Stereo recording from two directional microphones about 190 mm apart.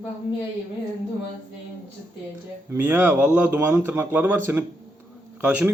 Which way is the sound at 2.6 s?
10° right (ahead or behind).